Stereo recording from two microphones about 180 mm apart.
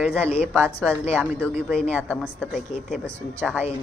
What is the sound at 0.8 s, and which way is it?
A woman's voice, centre (ahead or behind).